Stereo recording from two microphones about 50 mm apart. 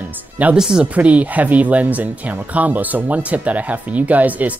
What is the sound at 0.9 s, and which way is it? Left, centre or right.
Speech, right.